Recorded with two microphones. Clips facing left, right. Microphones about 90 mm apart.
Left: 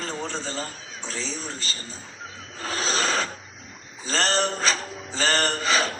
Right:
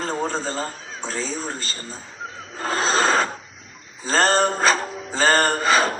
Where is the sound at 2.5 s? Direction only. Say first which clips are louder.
Right 6 dB; 35° right (ahead or behind).